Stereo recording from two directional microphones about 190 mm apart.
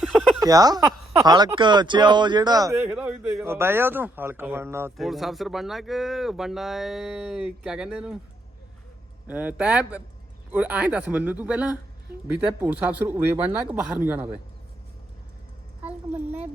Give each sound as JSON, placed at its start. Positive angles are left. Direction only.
{"t": 0.3, "sound": "speech", "side_deg": -20}
{"t": 4.9, "sound": "speech", "side_deg": 0}
{"t": 9.2, "sound": "speech", "side_deg": -10}
{"t": 15.9, "sound": "a woman's voice", "side_deg": -10}